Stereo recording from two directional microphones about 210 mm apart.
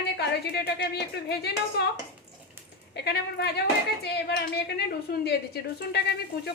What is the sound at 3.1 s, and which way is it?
A woman's voice, 50° left (ahead or behind).